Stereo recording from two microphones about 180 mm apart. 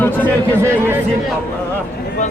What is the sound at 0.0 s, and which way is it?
Speech, 10° left (ahead or behind).